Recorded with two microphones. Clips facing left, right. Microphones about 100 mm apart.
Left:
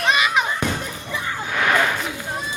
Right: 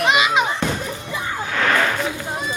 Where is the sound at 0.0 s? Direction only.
20° right (ahead or behind).